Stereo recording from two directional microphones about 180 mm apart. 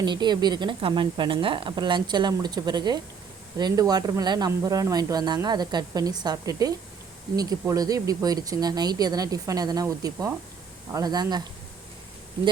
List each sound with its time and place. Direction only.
0.0 s speech: 25° right (ahead or behind)